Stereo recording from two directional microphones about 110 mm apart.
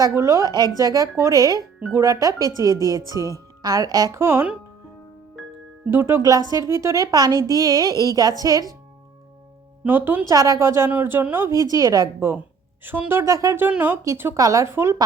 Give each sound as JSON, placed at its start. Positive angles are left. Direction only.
{"t": 0.1, "sound": "a woman's voice", "side_deg": -25}
{"t": 5.4, "sound": "music", "side_deg": 0}
{"t": 5.8, "sound": "a woman's voice", "side_deg": -20}
{"t": 9.8, "sound": "a woman's voice", "side_deg": -20}
{"t": 10.2, "sound": "a woman's voice", "side_deg": -35}
{"t": 12.8, "sound": "a woman's voice", "side_deg": -20}
{"t": 13.6, "sound": "a woman's voice", "side_deg": -15}